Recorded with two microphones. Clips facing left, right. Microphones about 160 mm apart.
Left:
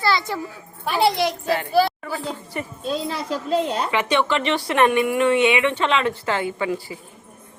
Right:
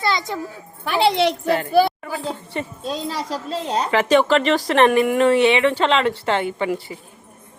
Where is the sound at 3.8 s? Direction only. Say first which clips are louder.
Right 4 dB; 40° right (ahead or behind).